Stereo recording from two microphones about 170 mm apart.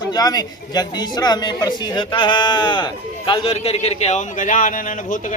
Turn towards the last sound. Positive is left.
turn(degrees=50)  # may be behind; listen again after turning